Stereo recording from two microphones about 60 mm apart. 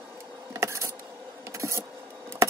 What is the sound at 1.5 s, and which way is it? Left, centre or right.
Vehicle, right.